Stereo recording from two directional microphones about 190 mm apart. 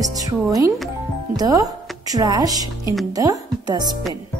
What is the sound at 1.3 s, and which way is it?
Speech, 20° right (ahead or behind).